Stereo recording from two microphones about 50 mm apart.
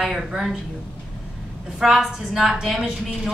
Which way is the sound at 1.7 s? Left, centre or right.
Centre.